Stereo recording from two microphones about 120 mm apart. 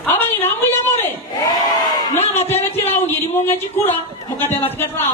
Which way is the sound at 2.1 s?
65° left (ahead or behind).